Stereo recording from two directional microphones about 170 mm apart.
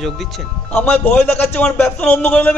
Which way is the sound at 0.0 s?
5° left (ahead or behind).